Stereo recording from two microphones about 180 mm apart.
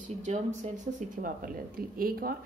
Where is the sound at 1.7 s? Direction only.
55° right (ahead or behind).